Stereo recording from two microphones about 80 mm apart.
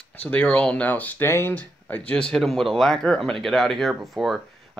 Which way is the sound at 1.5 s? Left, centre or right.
Centre.